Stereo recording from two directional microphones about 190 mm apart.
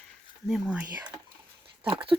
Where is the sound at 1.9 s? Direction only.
25° right (ahead or behind).